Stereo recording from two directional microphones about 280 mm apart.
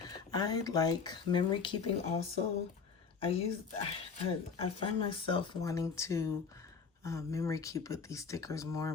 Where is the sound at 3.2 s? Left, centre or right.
Left.